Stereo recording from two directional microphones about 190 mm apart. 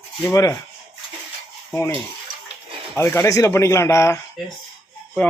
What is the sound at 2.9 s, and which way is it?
Speech, 15° left (ahead or behind).